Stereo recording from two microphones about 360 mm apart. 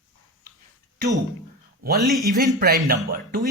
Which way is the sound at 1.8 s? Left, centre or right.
Right.